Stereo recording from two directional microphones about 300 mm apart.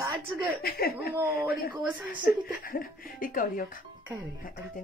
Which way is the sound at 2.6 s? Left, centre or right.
Left.